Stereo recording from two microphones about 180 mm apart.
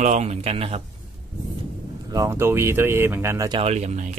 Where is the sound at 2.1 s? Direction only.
15° right (ahead or behind).